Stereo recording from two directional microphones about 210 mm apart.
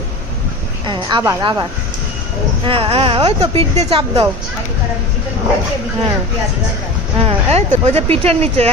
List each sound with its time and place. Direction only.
0.9 s a woman's voice: 20° right (ahead or behind)
2.6 s a woman's voice: 25° right (ahead or behind)
7.2 s a woman's voice: 30° right (ahead or behind)